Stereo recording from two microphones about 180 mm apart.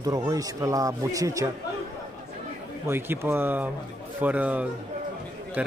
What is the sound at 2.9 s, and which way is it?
A man's voice, 10° right (ahead or behind).